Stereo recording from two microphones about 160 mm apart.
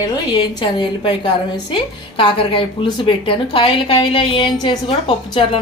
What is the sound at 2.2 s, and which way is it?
A woman's voice, 35° left (ahead or behind).